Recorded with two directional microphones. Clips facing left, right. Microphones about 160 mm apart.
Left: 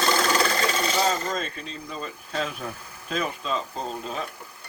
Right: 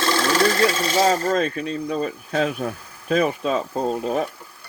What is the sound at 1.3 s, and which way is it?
Speech, 60° right (ahead or behind).